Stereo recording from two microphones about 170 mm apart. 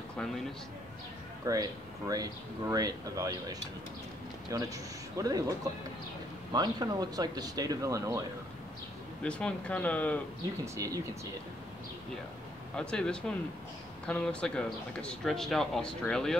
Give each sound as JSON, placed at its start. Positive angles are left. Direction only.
{"t": 1.4, "sound": "speech", "side_deg": -20}
{"t": 9.2, "sound": "speech", "side_deg": 5}
{"t": 10.6, "sound": "speech", "side_deg": -20}
{"t": 12.7, "sound": "speech", "side_deg": 5}